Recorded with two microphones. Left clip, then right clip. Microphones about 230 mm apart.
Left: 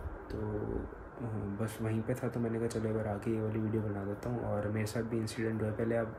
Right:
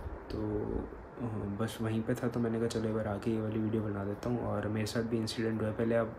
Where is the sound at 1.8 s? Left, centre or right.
Centre.